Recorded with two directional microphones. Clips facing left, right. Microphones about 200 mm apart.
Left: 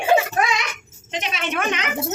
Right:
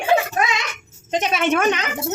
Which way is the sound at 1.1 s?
45° right (ahead or behind).